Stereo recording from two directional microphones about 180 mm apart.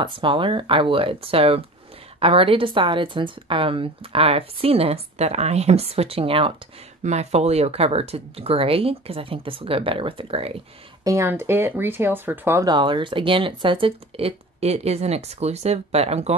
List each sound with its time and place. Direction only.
0.0 s a woman's voice: 30° right (ahead or behind)
11.1 s speech: 15° right (ahead or behind); by 16.3 s 35° right (ahead or behind)